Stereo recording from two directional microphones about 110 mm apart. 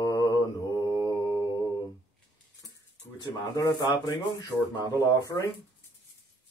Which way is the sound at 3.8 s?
45° left (ahead or behind).